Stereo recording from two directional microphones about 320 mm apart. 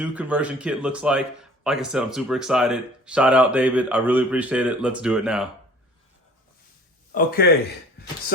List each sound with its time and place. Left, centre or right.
0.0 s speech: centre
7.1 s speech: left